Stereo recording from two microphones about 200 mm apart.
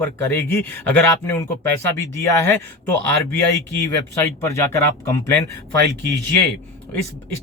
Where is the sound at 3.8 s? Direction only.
15° left (ahead or behind).